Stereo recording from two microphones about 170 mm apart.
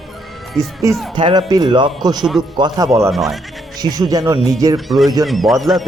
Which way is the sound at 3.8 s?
25° right (ahead or behind).